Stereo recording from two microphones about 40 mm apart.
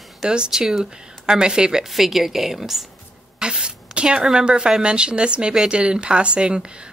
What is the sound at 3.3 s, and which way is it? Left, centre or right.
Speech, centre.